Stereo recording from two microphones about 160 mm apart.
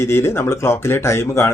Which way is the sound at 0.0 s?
15° left (ahead or behind).